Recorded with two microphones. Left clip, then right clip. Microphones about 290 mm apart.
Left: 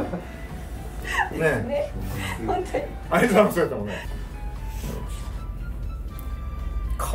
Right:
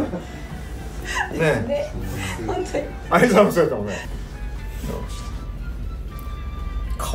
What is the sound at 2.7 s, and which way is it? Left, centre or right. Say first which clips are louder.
Speech: right 2 dB; left.